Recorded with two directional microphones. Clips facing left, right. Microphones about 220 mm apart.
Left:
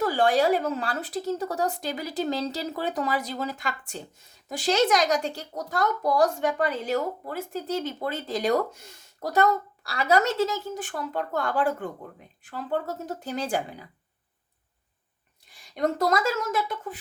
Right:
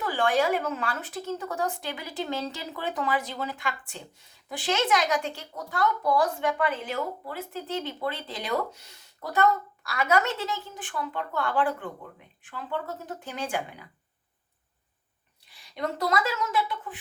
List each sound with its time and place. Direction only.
0.0 s speech: 40° left (ahead or behind)
15.4 s speech: 45° left (ahead or behind)